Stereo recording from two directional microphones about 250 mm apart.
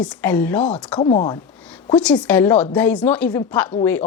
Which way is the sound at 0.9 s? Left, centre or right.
Centre.